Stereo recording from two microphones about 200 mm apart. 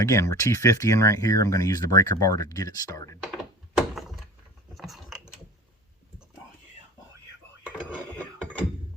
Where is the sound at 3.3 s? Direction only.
Centre (ahead or behind).